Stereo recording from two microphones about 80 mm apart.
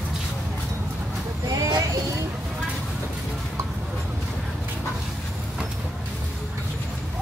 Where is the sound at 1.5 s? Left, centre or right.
Right.